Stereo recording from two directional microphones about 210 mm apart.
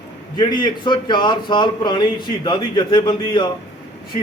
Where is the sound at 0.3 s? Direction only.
20° left (ahead or behind).